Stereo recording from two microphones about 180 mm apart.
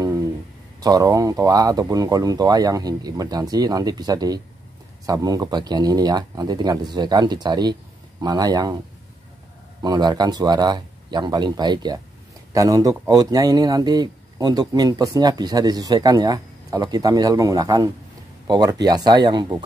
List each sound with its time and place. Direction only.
0.7 s speech: 20° right (ahead or behind)
9.8 s speech: 25° right (ahead or behind)